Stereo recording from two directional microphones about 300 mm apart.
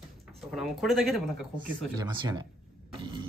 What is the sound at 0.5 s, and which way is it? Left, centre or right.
Speech, centre.